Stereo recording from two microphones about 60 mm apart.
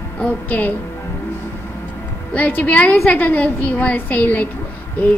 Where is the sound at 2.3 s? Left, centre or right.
Left.